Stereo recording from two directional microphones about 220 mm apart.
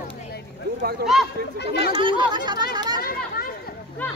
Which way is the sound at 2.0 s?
20° right (ahead or behind).